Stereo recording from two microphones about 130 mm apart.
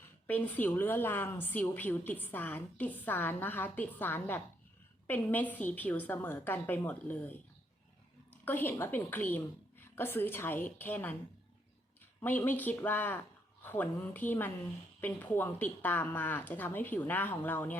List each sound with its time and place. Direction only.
0.3 s a woman's voice: 15° left (ahead or behind)
8.4 s a woman's voice: 15° left (ahead or behind)
12.2 s a woman's voice: 15° left (ahead or behind)